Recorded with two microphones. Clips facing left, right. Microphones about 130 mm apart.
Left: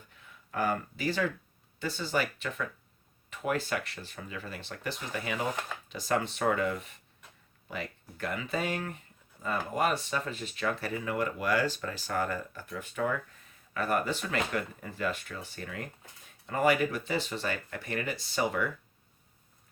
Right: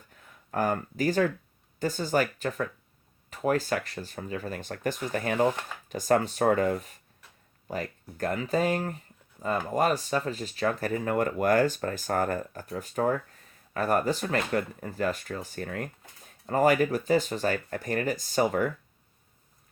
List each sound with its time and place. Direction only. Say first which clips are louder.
0.1 s speech: right 5 dB; 45° right (ahead or behind)